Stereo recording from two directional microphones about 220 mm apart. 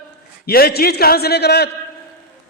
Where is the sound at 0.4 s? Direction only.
45° left (ahead or behind).